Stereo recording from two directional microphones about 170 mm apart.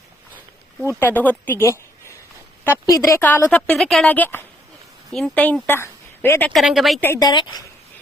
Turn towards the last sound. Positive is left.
turn(degrees=25)  # may be behind; listen again after turning